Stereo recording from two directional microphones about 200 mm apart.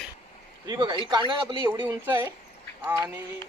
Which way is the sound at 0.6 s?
20° right (ahead or behind).